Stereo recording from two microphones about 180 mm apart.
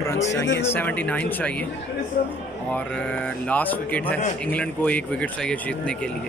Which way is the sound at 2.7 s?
5° left (ahead or behind).